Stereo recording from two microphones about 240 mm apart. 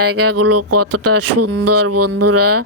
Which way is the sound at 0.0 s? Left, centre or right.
Right.